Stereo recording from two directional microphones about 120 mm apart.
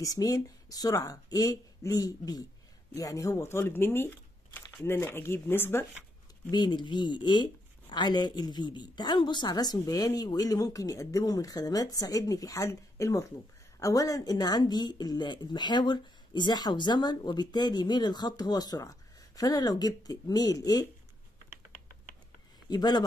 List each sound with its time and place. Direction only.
0.0 s speech: 30° left (ahead or behind)
6.5 s speech: 40° left (ahead or behind)
22.7 s speech: 35° left (ahead or behind)